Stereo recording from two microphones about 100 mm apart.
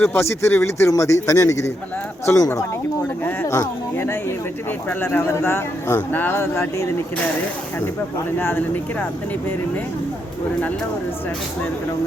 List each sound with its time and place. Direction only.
0.0 s speech: 25° left (ahead or behind)
8.4 s speech: 20° left (ahead or behind)